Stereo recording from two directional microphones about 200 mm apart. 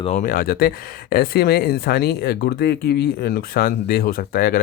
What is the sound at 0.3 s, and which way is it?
Speech, 45° left (ahead or behind).